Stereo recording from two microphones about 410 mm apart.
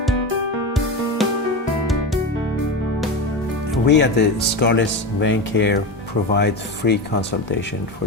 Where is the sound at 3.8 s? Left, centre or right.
Left.